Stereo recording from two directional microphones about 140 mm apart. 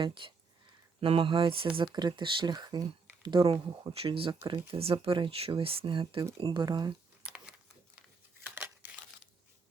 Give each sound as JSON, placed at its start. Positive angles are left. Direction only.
{"t": 0.0, "sound": "speech", "side_deg": -35}
{"t": 7.2, "sound": "a sound", "side_deg": -10}
{"t": 8.4, "sound": "crumpling", "side_deg": -15}